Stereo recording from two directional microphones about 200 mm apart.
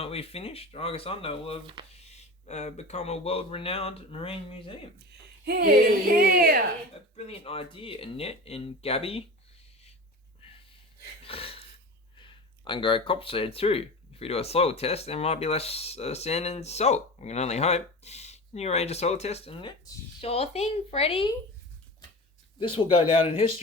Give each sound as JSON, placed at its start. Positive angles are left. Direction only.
{"t": 0.0, "sound": "speech", "side_deg": 30}
{"t": 5.5, "sound": "speech", "side_deg": -50}
{"t": 7.2, "sound": "speech", "side_deg": 30}
{"t": 11.2, "sound": "a sound", "side_deg": 30}
{"t": 12.1, "sound": "speech", "side_deg": 25}
{"t": 22.6, "sound": "speech", "side_deg": 25}